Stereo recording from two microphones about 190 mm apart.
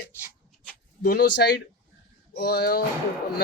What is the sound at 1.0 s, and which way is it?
Speech, 60° left (ahead or behind).